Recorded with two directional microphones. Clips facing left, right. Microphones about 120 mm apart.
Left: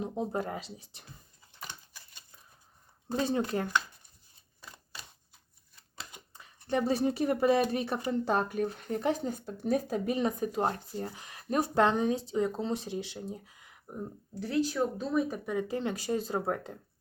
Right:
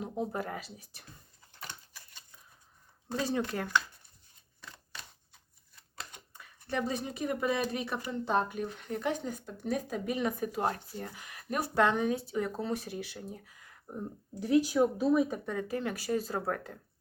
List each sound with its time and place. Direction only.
0.0 s speech: 25° left (ahead or behind)
3.2 s speech: 30° left (ahead or behind)
6.0 s a sound: 10° left (ahead or behind)
6.3 s speech: 25° left (ahead or behind)
8.3 s speech: 45° left (ahead or behind); by 13.7 s 20° left (ahead or behind)
14.3 s speech: 15° right (ahead or behind)
15.4 s speech: 20° left (ahead or behind)